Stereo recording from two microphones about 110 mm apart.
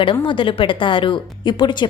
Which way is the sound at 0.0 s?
50° left (ahead or behind).